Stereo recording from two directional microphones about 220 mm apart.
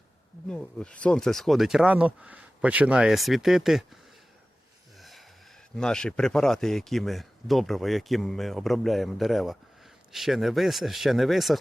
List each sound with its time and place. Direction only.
0.4 s speech: 5° left (ahead or behind)
4.9 s a sound: centre (ahead or behind)
5.7 s speech: 5° left (ahead or behind)